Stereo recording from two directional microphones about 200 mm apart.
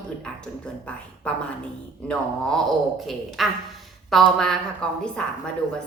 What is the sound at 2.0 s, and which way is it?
A woman's voice, 5° left (ahead or behind).